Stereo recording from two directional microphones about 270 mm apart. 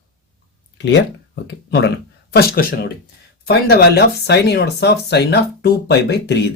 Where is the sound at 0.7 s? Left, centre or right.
Left.